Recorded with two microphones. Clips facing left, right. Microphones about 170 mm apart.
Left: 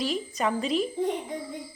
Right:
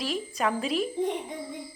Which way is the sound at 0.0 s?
Centre (ahead or behind).